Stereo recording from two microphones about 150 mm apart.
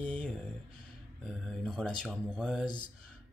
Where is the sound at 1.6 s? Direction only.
5° left (ahead or behind).